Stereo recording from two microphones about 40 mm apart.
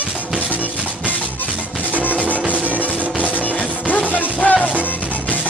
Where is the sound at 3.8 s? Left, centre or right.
Left.